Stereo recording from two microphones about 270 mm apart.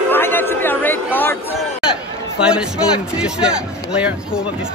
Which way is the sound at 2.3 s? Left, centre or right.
Centre.